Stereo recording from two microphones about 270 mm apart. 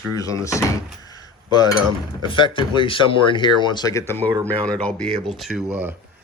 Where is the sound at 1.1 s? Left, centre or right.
Centre.